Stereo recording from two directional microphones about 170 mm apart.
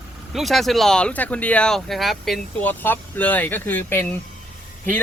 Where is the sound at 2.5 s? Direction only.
10° left (ahead or behind).